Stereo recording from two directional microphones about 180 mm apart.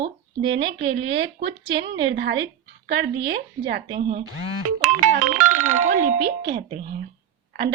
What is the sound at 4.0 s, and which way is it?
Speech, 30° right (ahead or behind).